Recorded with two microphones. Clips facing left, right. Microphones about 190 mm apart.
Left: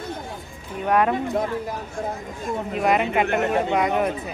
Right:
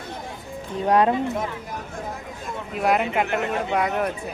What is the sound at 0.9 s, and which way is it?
Speech, 25° right (ahead or behind).